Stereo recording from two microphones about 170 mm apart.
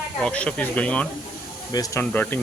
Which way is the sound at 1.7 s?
20° left (ahead or behind).